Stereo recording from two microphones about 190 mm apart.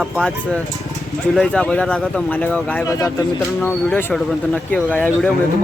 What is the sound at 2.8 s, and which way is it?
Speech, 15° left (ahead or behind).